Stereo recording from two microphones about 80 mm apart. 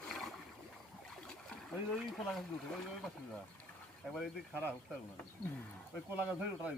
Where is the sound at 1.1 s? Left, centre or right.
Centre.